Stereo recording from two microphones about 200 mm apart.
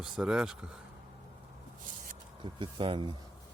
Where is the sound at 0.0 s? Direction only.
5° right (ahead or behind).